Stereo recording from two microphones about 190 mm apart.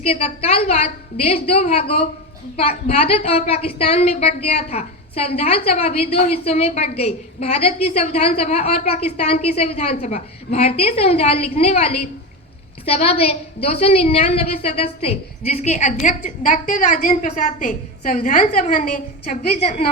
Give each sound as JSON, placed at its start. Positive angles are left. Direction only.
{"t": 0.0, "sound": "a woman's voice", "side_deg": 30}